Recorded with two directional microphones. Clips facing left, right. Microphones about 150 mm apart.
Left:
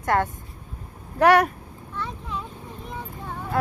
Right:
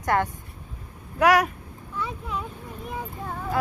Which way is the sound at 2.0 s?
10° right (ahead or behind).